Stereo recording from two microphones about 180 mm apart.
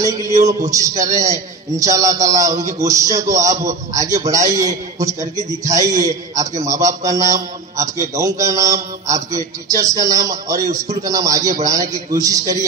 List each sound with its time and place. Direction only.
0.0 s a man's voice: 20° right (ahead or behind)